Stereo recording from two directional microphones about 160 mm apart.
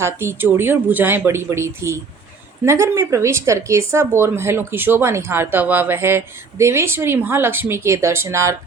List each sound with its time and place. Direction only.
0.0 s speech: 15° right (ahead or behind)